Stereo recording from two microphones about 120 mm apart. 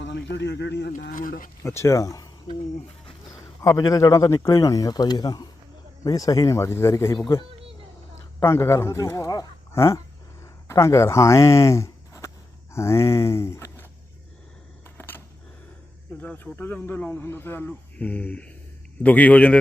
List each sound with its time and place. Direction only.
1.6 s speech: 25° left (ahead or behind)
3.6 s speech: 30° left (ahead or behind)
10.4 s a sound: 25° left (ahead or behind)
12.7 s speech: 25° left (ahead or behind)
14.9 s a sound: 15° left (ahead or behind)
16.1 s a man's voice: 15° left (ahead or behind)